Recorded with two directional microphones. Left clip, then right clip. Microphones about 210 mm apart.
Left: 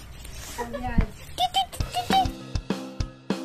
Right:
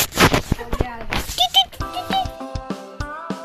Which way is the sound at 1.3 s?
5° right (ahead or behind).